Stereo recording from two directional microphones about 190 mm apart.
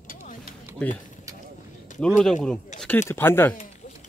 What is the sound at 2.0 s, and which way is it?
Speech, centre (ahead or behind).